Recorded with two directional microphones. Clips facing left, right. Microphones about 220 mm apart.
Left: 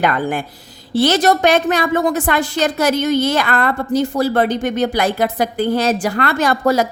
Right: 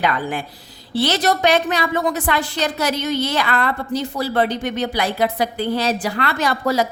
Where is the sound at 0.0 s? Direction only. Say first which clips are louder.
Left 4 dB; 50° left (ahead or behind).